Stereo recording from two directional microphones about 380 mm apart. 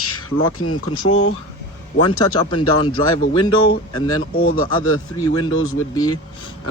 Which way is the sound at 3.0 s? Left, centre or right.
Left.